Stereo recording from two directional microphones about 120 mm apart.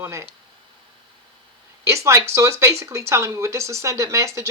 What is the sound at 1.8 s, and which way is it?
Speech, 25° right (ahead or behind).